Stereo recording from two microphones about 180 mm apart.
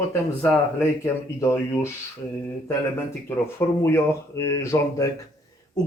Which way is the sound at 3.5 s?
15° left (ahead or behind).